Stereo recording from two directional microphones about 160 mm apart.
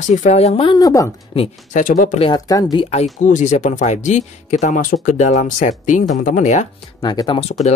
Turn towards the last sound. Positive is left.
turn(degrees=40)  # may be behind; listen again after turning